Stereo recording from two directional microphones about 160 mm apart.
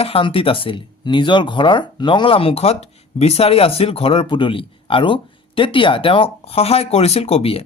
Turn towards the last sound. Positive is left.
turn(degrees=40)  # may be behind; listen again after turning